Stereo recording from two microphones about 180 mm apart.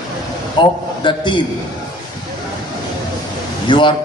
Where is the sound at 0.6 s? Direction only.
25° left (ahead or behind).